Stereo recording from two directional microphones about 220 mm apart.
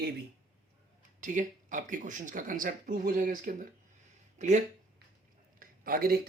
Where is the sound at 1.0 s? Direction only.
35° right (ahead or behind).